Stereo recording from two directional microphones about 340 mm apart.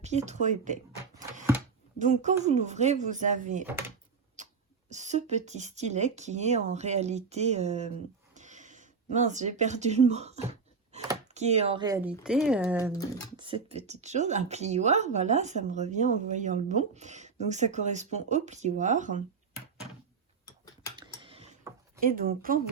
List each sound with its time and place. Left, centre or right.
0.0 s speech: centre
2.0 s speech: right
3.7 s speech: centre
4.4 s sneeze: right
4.9 s speech: right
12.9 s speech: centre
13.3 s speech: centre
20.4 s tick-tock: centre
21.2 s a sound: centre
22.1 s speech: right